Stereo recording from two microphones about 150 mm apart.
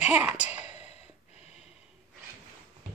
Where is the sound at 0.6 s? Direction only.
45° left (ahead or behind).